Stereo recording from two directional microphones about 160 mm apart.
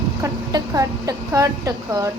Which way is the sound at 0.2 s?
20° right (ahead or behind).